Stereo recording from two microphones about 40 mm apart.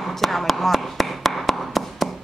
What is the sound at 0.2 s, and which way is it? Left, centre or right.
Tap, centre.